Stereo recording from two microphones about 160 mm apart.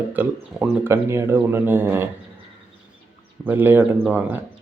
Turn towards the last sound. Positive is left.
turn(degrees=-10)  # may be behind; listen again after turning